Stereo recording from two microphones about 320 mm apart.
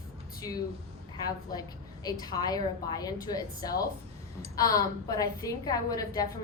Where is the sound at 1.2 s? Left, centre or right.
Centre.